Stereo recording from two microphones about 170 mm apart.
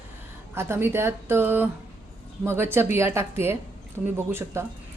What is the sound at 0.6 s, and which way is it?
A woman's voice, 15° right (ahead or behind).